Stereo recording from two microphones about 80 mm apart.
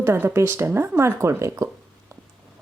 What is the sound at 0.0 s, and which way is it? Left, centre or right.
A woman's voice, right.